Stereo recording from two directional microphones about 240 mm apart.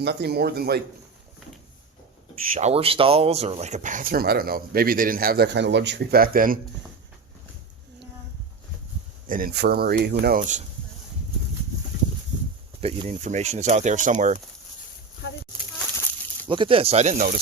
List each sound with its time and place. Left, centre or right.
0.0 s speech: right
2.5 s speech: right
9.2 s speech: right
12.8 s speech: right
16.5 s speech: right